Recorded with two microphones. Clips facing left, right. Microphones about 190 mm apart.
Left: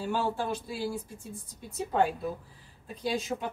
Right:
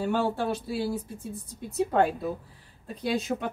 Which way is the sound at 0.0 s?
60° right (ahead or behind).